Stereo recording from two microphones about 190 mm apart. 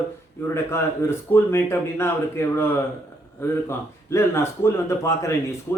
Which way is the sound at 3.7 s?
15° left (ahead or behind).